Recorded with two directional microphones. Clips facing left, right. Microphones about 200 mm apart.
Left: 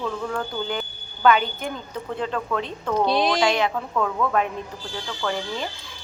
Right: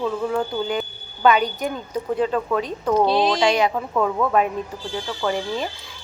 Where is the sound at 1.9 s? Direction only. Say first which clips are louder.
Right 7 dB; 15° right (ahead or behind).